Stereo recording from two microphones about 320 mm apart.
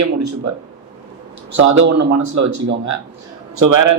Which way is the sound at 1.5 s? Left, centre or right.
Right.